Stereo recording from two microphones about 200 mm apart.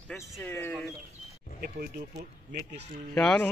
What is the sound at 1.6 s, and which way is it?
Speech, 50° right (ahead or behind).